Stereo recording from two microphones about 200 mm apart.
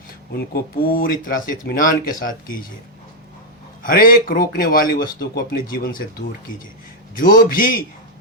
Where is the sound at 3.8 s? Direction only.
45° left (ahead or behind).